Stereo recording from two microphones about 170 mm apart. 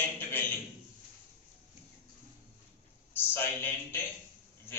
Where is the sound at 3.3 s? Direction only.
10° left (ahead or behind).